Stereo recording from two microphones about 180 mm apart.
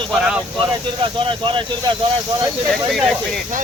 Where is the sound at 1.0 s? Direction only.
30° right (ahead or behind).